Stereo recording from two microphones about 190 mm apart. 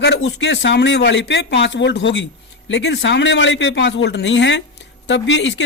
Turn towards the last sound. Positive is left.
turn(degrees=75)  # may be behind; listen again after turning